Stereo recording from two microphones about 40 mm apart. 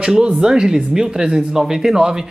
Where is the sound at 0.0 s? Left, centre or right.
Right.